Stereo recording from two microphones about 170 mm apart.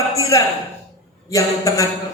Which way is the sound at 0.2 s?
20° left (ahead or behind).